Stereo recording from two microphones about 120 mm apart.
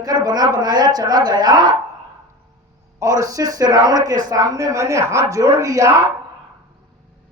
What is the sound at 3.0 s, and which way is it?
Speech, 30° right (ahead or behind).